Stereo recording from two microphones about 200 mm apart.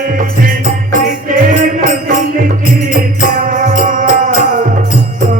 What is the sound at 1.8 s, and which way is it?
Music, 40° right (ahead or behind).